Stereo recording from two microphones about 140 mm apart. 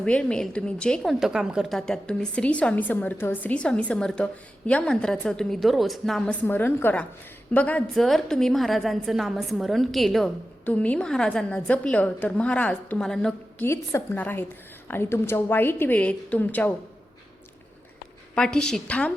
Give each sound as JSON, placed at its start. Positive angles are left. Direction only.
{"t": 0.0, "sound": "a woman's voice", "side_deg": 5}
{"t": 1.2, "sound": "a woman's voice", "side_deg": -5}
{"t": 13.7, "sound": "a woman's voice", "side_deg": 15}
{"t": 18.3, "sound": "a woman's voice", "side_deg": 5}